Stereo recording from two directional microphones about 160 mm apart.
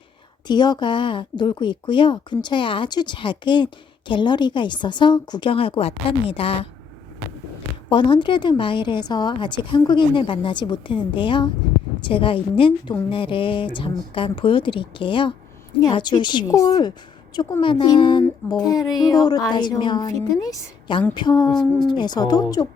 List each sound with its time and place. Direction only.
0.4 s a woman's voice: 25° left (ahead or behind)
7.9 s a woman's voice: 30° left (ahead or behind)